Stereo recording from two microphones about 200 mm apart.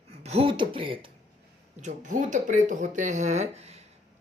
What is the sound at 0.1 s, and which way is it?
Speech, 30° right (ahead or behind).